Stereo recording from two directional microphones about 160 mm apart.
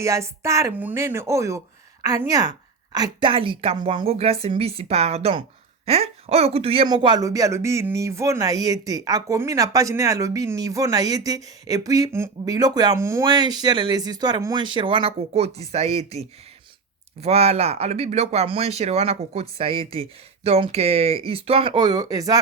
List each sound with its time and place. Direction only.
0.0 s speech: 20° right (ahead or behind); by 6.8 s 35° right (ahead or behind)
6.8 s speech: 25° right (ahead or behind)